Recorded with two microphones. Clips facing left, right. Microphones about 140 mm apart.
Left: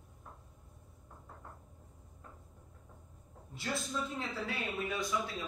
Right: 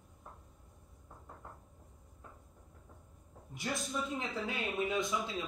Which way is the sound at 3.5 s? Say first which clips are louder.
Even; 15° right (ahead or behind).